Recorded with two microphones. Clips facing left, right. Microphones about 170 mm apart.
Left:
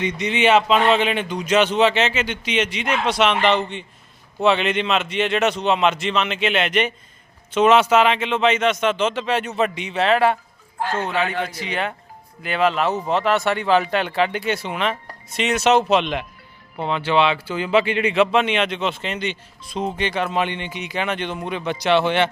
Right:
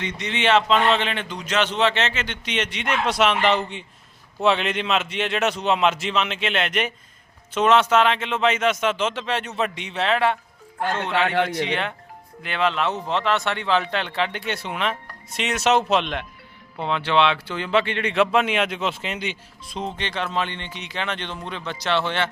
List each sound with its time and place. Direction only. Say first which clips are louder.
0.0 s speech: left 5 dB; 15° left (ahead or behind)
11.1 s a man's voice: right 2 dB; 70° right (ahead or behind)
11.7 s speech: left 1 dB; 5° left (ahead or behind)